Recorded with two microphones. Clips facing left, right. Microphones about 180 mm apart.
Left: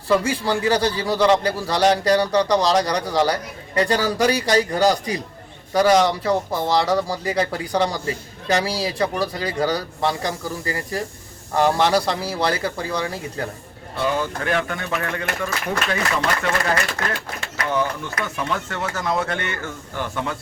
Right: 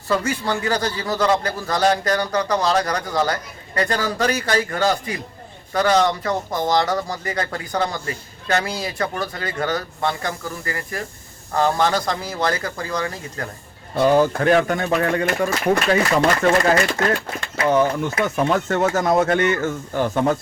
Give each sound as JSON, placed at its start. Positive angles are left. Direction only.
{"t": 0.1, "sound": "speech", "side_deg": 10}
{"t": 13.9, "sound": "speech", "side_deg": -45}